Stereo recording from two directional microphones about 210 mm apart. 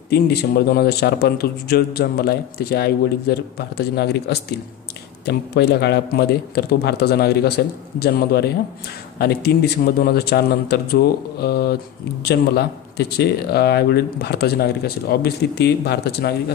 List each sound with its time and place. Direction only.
0.1 s a man's voice: 50° left (ahead or behind)